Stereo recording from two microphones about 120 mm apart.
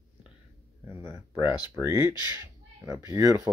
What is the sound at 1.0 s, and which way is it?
Speech, 20° right (ahead or behind).